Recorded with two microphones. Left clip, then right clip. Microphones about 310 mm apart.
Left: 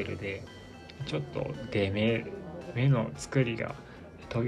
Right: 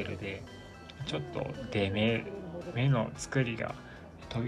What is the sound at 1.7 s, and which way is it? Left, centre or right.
Speech, right.